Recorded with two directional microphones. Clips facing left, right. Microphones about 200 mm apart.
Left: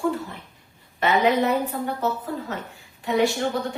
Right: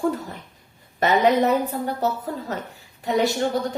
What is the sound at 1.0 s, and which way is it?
A woman's voice, 40° right (ahead or behind).